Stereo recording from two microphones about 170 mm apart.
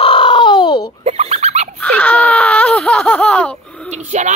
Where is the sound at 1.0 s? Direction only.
40° right (ahead or behind).